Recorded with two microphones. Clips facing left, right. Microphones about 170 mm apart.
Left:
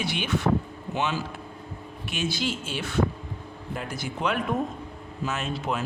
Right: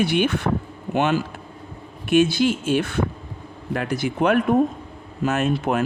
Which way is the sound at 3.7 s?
75° right (ahead or behind).